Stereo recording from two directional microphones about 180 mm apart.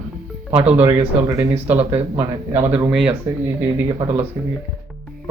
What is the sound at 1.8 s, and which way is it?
Speech, 35° right (ahead or behind).